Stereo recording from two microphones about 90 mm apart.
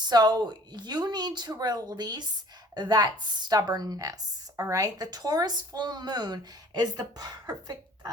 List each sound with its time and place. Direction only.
0.1 s speech: 50° right (ahead or behind)